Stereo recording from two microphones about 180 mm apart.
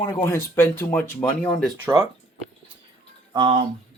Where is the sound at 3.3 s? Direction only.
25° right (ahead or behind).